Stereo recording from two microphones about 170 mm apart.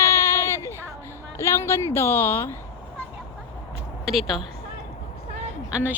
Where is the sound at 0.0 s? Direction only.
15° left (ahead or behind).